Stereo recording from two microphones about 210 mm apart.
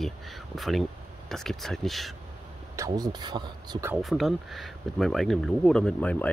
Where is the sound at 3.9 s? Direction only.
Centre (ahead or behind).